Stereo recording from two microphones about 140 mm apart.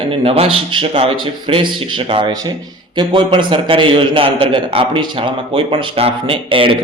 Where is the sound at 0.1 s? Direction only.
40° right (ahead or behind).